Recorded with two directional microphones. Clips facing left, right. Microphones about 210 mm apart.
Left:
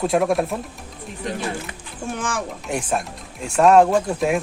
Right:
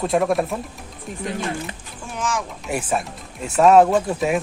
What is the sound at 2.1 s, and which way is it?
Speech, 55° left (ahead or behind).